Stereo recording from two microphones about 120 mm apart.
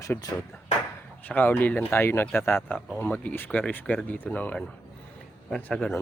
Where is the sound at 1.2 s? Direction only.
15° left (ahead or behind).